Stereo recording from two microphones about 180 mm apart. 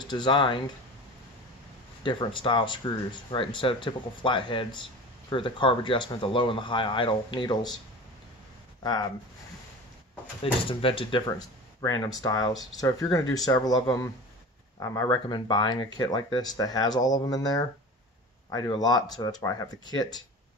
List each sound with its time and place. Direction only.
0.0 s speech: 25° left (ahead or behind)
2.0 s speech: 25° left (ahead or behind)
8.8 s speech: 25° left (ahead or behind)
10.4 s speech: 30° left (ahead or behind)